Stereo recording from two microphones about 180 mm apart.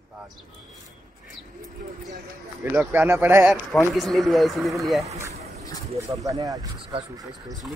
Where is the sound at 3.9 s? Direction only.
Centre (ahead or behind).